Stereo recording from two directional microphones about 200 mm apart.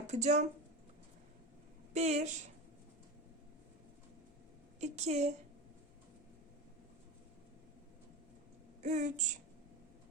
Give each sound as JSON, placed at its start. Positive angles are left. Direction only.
{"t": 0.1, "sound": "speech", "side_deg": -35}
{"t": 1.9, "sound": "speech", "side_deg": -35}
{"t": 4.8, "sound": "speech", "side_deg": -35}
{"t": 8.8, "sound": "speech", "side_deg": -35}